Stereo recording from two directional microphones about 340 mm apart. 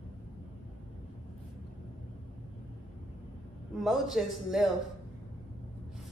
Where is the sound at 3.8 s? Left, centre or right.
Centre.